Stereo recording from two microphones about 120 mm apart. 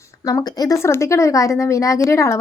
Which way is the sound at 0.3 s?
30° left (ahead or behind).